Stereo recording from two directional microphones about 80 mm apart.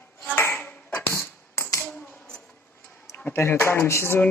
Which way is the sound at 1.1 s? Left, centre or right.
Left.